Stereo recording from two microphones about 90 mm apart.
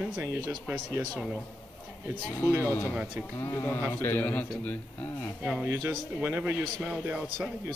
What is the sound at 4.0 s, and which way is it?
Speech, 20° left (ahead or behind).